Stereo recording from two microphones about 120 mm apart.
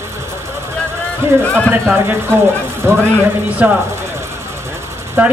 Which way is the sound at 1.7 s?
20° right (ahead or behind).